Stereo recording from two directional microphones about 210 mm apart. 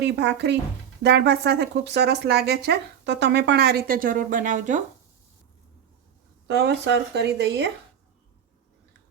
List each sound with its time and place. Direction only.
0.0 s speech: 55° right (ahead or behind); by 4.8 s 35° right (ahead or behind)
6.5 s speech: 55° right (ahead or behind)